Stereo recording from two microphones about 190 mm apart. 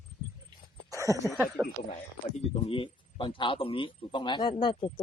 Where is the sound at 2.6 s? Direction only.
30° left (ahead or behind).